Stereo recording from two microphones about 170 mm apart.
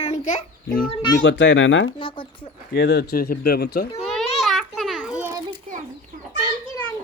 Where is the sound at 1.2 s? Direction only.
90° left.